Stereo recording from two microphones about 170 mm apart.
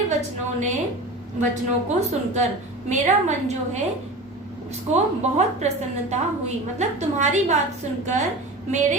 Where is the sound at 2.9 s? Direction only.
45° right (ahead or behind).